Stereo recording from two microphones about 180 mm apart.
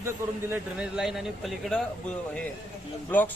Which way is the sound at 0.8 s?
Centre (ahead or behind).